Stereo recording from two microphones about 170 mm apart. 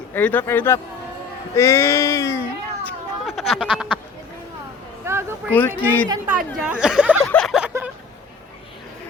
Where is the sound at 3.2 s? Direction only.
Centre (ahead or behind).